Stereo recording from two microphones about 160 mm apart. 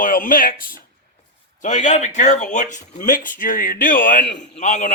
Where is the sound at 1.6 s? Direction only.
50° left (ahead or behind).